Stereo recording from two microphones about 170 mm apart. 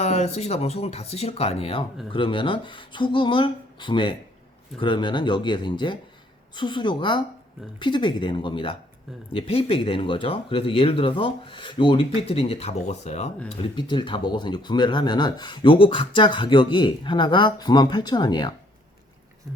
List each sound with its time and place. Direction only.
0.0 s speech: 40° left (ahead or behind); by 18.5 s 25° left (ahead or behind)